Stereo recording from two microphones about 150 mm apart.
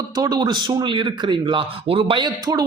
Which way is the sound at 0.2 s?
30° right (ahead or behind).